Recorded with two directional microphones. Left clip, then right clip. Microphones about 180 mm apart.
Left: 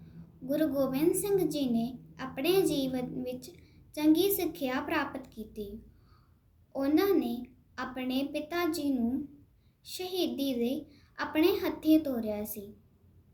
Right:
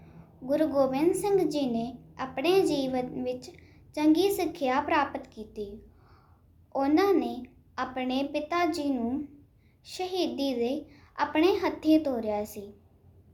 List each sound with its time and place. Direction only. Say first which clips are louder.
0.0 s a woman's voice: right 3 dB; 15° left (ahead or behind)
6.7 s a woman's voice: right 3 dB; 15° left (ahead or behind)